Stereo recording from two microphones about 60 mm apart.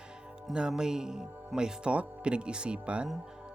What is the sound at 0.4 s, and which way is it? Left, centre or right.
Speech, centre.